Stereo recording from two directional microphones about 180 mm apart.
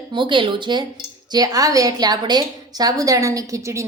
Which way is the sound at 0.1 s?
25° right (ahead or behind).